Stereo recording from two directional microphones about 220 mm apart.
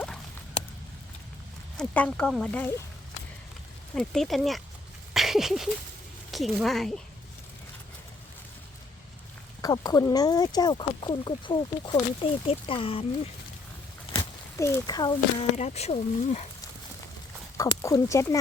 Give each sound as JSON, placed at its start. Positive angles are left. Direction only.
{"t": 1.7, "sound": "speech", "side_deg": 5}
{"t": 3.9, "sound": "speech", "side_deg": 0}
{"t": 5.1, "sound": "a sound", "side_deg": 0}
{"t": 6.3, "sound": "speech", "side_deg": 0}
{"t": 9.6, "sound": "speech", "side_deg": 15}
{"t": 14.2, "sound": "speech", "side_deg": 15}
{"t": 15.5, "sound": "speech", "side_deg": 30}
{"t": 17.6, "sound": "speech", "side_deg": 15}